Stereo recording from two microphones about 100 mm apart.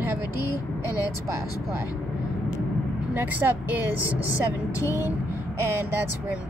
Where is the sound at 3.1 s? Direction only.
20° right (ahead or behind).